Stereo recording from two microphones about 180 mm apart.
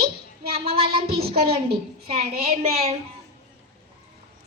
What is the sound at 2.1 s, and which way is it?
Speech, 35° right (ahead or behind).